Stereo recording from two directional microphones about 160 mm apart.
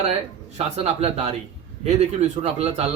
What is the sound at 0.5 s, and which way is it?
A man's voice, 40° right (ahead or behind).